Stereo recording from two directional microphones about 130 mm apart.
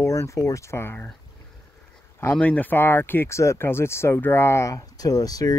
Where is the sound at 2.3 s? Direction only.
15° left (ahead or behind).